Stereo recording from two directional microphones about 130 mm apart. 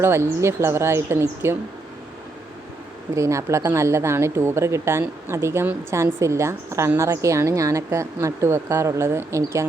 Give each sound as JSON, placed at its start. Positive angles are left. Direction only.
{"t": 0.0, "sound": "speech", "side_deg": -20}
{"t": 3.2, "sound": "speech", "side_deg": -25}